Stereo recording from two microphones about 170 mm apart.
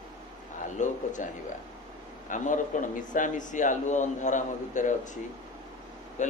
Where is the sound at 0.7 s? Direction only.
50° left (ahead or behind).